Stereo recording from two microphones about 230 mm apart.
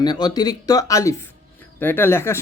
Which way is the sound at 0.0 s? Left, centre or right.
Centre.